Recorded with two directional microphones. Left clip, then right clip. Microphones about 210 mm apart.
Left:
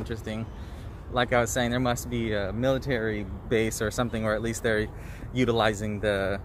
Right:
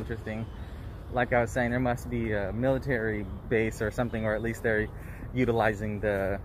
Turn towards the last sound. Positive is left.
turn(degrees=5)  # may be behind; listen again after turning